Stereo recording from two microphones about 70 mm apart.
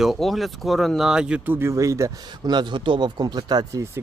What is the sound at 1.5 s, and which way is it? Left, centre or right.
Speech, right.